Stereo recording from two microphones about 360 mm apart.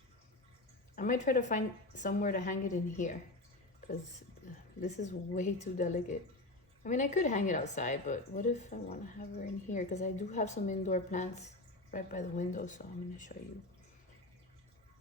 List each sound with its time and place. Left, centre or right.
0.9 s a woman's voice: left
4.8 s a woman's voice: centre